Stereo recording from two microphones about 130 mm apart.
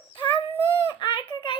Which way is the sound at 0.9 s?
40° left (ahead or behind).